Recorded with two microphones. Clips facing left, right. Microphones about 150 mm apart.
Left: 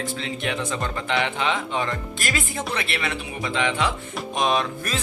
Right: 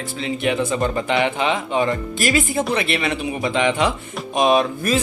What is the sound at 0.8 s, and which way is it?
Speech, 20° right (ahead or behind).